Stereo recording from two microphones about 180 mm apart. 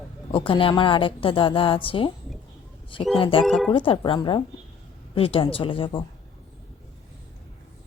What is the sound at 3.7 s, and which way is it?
A woman's voice, 30° left (ahead or behind).